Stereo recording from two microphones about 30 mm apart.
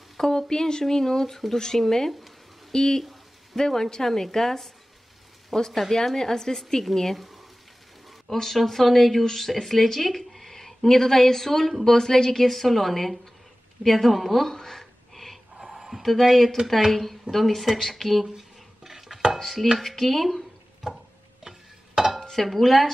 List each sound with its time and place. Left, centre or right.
0.2 s a woman's voice: centre
5.7 s a woman's voice: centre
8.3 s a woman's voice: centre
13.8 s a sound: centre
15.6 s a sound: centre
16.0 s a woman's voice: centre
18.9 s chopping: centre
19.3 s chopping: centre
20.0 s a woman's voice: centre
21.5 s stir: centre
22.2 s speech: centre